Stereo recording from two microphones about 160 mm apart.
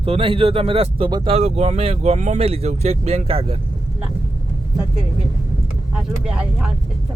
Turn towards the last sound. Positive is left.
turn(degrees=-5)  # may be behind; listen again after turning